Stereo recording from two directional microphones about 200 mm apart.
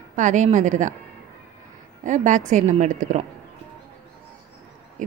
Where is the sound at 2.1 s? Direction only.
40° right (ahead or behind).